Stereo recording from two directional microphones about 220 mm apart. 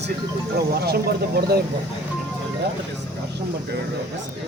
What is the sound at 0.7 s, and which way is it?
Speech, 45° right (ahead or behind).